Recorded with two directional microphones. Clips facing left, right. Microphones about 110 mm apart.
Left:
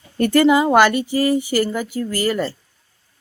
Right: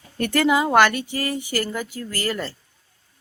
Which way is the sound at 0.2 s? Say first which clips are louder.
Left 5 dB; centre (ahead or behind).